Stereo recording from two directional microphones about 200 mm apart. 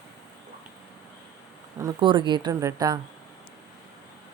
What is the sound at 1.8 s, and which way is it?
Speech, 20° right (ahead or behind).